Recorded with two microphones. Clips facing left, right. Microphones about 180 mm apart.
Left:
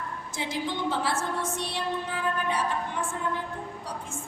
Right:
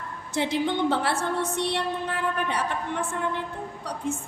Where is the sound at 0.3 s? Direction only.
65° right (ahead or behind).